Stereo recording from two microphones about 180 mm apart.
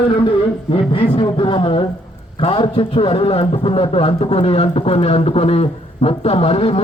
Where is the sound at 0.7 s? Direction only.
30° left (ahead or behind).